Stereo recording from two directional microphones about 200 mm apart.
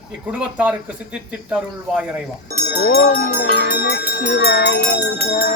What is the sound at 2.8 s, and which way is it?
Speech, 45° left (ahead or behind).